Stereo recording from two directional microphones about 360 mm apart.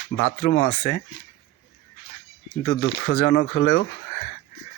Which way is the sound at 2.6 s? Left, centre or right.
Left.